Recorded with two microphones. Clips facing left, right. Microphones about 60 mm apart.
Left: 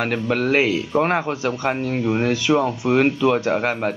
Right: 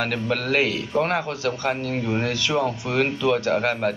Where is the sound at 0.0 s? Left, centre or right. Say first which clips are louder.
Left 4 dB; centre.